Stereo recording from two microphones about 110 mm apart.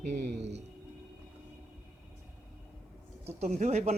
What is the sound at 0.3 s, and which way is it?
Music, 90° right.